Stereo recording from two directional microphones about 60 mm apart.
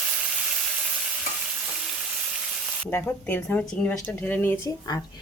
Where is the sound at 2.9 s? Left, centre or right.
Left.